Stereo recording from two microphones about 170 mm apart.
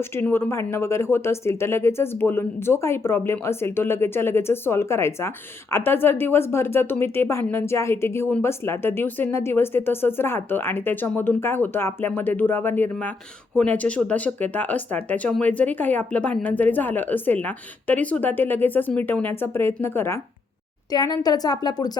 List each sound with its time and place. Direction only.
0.2 s a woman's voice: 10° left (ahead or behind)